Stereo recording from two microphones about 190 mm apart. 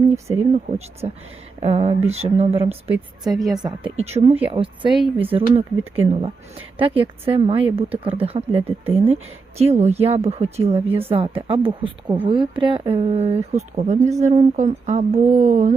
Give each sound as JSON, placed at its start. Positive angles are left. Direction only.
{"t": 0.3, "sound": "speech", "side_deg": -35}
{"t": 3.3, "sound": "a woman's voice", "side_deg": 0}
{"t": 3.6, "sound": "speech", "side_deg": -25}